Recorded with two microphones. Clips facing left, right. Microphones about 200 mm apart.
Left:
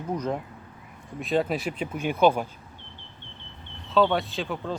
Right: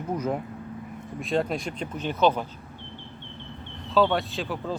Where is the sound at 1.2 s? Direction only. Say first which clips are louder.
Left 1 dB; centre (ahead or behind).